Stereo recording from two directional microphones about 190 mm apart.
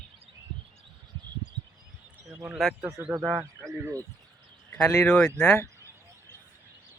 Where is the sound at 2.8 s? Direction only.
15° right (ahead or behind).